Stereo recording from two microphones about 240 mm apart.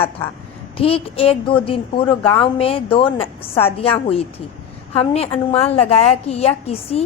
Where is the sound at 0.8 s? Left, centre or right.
Left.